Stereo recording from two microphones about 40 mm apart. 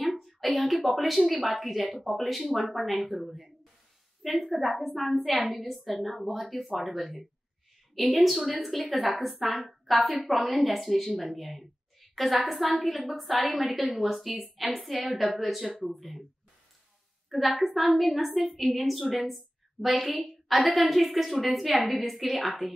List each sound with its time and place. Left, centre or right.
0.0 s a woman's voice: centre
17.3 s a woman's voice: centre